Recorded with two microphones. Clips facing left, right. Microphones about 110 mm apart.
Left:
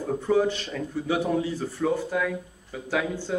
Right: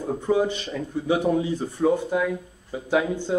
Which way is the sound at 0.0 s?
15° right (ahead or behind).